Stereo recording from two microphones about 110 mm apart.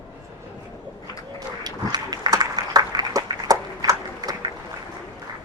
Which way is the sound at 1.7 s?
35° right (ahead or behind).